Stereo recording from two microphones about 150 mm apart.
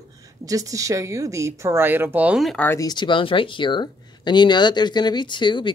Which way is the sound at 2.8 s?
30° left (ahead or behind).